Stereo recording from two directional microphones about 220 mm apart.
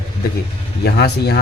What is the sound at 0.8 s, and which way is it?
Speech, 50° left (ahead or behind).